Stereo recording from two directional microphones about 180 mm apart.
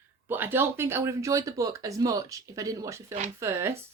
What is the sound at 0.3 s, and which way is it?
Speech, 10° right (ahead or behind).